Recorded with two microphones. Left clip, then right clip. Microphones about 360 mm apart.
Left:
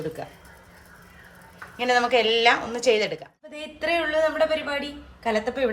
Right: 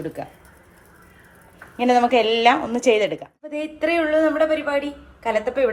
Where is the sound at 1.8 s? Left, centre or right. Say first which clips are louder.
Right 4 dB; centre.